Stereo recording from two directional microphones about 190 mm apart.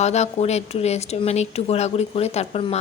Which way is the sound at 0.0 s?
35° left (ahead or behind).